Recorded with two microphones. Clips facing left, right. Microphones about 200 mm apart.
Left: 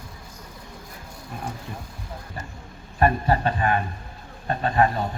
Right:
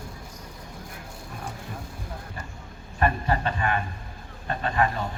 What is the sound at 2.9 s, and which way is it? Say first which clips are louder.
Speech: left 4 dB; 40° left (ahead or behind).